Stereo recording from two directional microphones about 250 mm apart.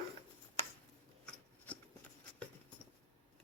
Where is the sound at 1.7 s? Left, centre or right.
Centre.